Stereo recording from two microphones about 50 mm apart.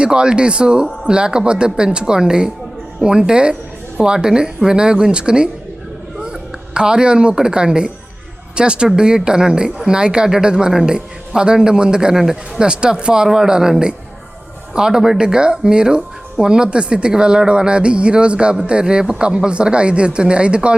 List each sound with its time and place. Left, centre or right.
0.0 s speech: centre
6.7 s speech: centre